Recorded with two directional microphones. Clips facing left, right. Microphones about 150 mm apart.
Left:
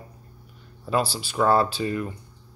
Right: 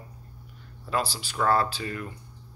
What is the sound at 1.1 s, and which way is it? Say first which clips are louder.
Speech: left 4 dB; 15° left (ahead or behind).